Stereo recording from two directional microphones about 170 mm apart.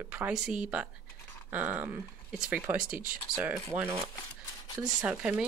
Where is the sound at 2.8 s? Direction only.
55° right (ahead or behind).